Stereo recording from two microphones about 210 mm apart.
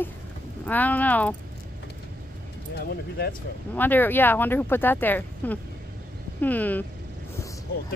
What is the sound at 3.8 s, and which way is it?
A woman's voice, 10° left (ahead or behind).